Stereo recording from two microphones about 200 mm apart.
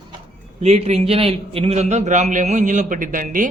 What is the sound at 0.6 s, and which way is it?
A man's voice, 35° right (ahead or behind).